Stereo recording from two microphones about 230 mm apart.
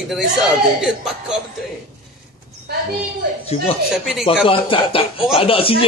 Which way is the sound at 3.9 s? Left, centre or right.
Centre.